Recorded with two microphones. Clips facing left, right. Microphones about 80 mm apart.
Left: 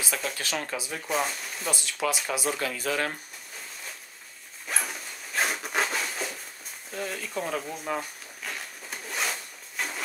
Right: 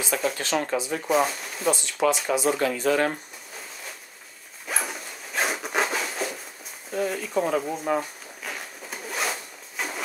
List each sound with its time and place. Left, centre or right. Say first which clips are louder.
0.0 s speech: right 6 dB; centre
4.6 s dog: right 2 dB; centre
6.9 s speech: right 7 dB; centre
7.8 s zipper: right 6 dB; centre